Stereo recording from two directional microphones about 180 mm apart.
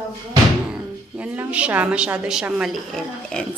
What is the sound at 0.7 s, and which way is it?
A woman's voice, 5° right (ahead or behind).